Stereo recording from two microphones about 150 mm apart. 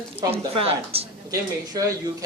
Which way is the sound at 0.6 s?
40° right (ahead or behind).